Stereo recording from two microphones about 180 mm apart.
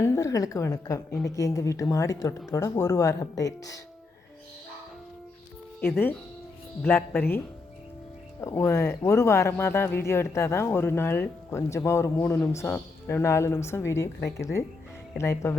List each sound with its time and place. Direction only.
0.0 s speech: 15° left (ahead or behind)
6.8 s speech: 10° left (ahead or behind)